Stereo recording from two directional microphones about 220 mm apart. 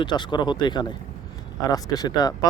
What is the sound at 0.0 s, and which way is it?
Speech, 20° left (ahead or behind).